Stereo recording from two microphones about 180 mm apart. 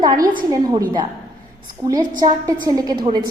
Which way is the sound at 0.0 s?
20° right (ahead or behind).